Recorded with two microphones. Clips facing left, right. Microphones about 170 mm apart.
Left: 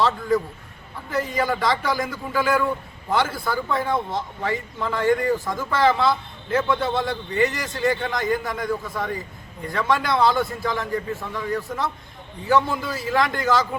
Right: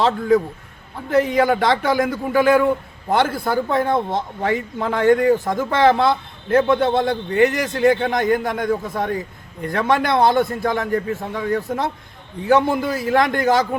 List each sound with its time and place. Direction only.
0.0 s speech: 55° right (ahead or behind)